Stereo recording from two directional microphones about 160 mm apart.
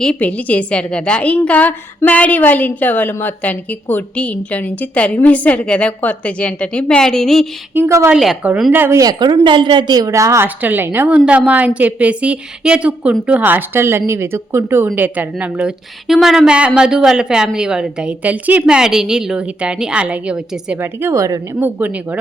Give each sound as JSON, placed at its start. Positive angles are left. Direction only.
{"t": 0.0, "sound": "a woman's voice", "side_deg": 5}
{"t": 7.7, "sound": "a woman's voice", "side_deg": -15}
{"t": 8.1, "sound": "a woman's voice", "side_deg": -5}
{"t": 8.8, "sound": "a woman's voice", "side_deg": -20}